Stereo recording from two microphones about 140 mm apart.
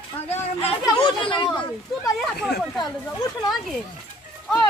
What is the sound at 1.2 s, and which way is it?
Speech, 35° left (ahead or behind).